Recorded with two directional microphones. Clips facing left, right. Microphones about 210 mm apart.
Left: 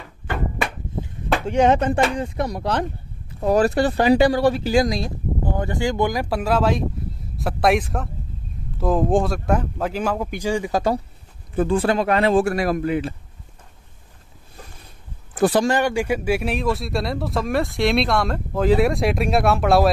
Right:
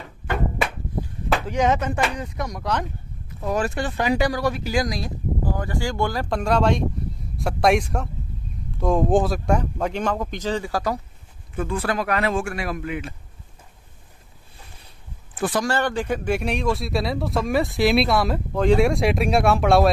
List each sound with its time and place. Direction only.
1.0 s speech: 30° left (ahead or behind)
11.5 s speech: 30° left (ahead or behind)
15.3 s a sound: 40° left (ahead or behind)
15.6 s speech: 15° left (ahead or behind)